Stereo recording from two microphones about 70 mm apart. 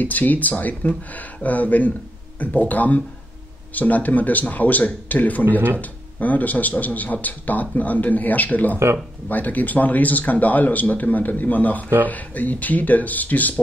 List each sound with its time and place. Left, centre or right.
0.0 s speech: left